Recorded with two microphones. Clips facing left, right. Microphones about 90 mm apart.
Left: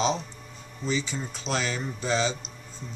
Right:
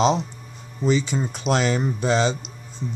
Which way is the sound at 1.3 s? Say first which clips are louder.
Right 8 dB; 60° right (ahead or behind).